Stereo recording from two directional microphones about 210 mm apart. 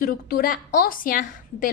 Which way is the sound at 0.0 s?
45° left (ahead or behind).